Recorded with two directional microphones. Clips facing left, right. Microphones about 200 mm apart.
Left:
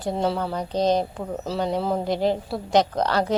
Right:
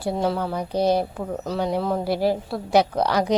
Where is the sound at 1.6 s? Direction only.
10° right (ahead or behind).